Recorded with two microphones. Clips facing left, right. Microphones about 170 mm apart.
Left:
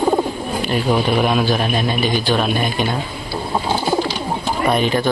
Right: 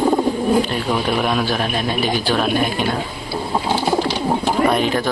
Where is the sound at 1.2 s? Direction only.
Centre (ahead or behind).